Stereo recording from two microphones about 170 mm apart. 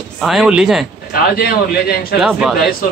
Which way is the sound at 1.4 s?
65° left (ahead or behind).